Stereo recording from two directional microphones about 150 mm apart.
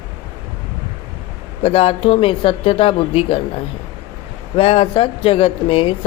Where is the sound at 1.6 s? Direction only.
40° left (ahead or behind).